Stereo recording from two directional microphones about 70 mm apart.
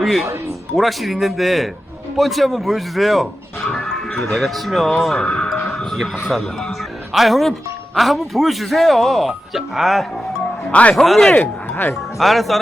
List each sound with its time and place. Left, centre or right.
0.0 s speech: centre
3.7 s music: centre
4.4 s speech: centre
5.2 s music: centre
5.6 s speech: centre
10.7 s a man's voice: centre
10.9 s speech: centre
11.3 s speech: left
12.2 s speech: centre